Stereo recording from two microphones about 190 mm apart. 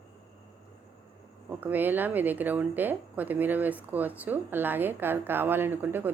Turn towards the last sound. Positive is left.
turn(degrees=-10)  # may be behind; listen again after turning